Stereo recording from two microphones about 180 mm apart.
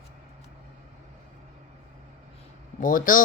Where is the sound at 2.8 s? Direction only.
50° left (ahead or behind).